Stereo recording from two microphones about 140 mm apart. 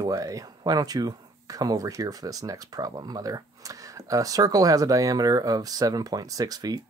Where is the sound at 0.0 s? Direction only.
25° right (ahead or behind).